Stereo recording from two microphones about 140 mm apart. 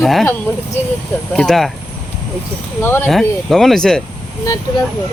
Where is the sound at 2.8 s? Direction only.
15° left (ahead or behind).